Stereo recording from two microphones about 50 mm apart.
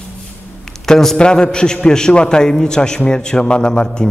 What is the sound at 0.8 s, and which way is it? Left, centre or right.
A man's voice, centre.